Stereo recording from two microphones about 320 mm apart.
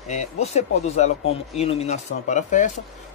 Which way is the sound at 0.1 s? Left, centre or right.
Left.